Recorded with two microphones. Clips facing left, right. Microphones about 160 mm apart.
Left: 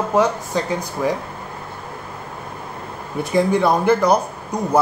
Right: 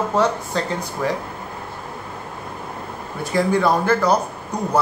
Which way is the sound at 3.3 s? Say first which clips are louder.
Left 1 dB; 20° left (ahead or behind).